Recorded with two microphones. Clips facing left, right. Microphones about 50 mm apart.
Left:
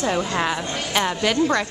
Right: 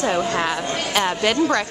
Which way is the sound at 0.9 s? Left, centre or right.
Centre.